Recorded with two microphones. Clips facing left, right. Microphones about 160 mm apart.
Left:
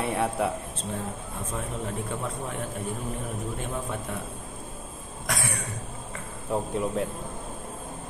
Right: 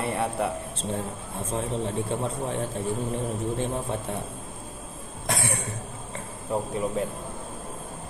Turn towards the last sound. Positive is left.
turn(degrees=0)  # may be behind; listen again after turning